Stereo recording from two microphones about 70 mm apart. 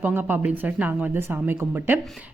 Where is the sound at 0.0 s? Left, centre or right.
Right.